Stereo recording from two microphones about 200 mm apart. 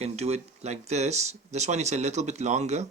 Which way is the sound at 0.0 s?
35° right (ahead or behind).